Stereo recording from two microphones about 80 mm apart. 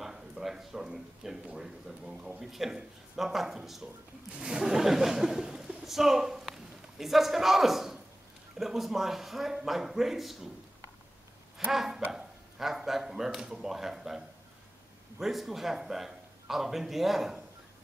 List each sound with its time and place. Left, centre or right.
0.0 s a sound: centre
1.6 s a man's voice: centre
11.7 s a man's voice: centre